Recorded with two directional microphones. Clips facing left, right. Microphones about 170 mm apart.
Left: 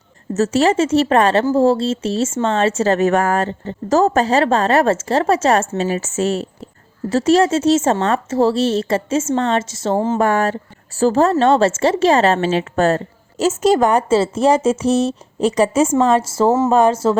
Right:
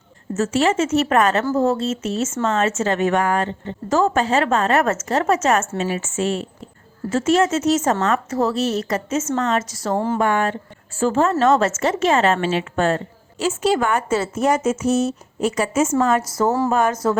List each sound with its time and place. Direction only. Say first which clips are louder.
0.3 s a woman's voice: left 4 dB; 40° left (ahead or behind)
10.2 s a woman's voice: left 3 dB; 40° left (ahead or behind)